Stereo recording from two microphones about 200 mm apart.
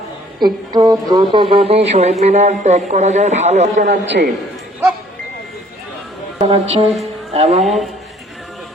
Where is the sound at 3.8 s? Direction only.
60° right (ahead or behind).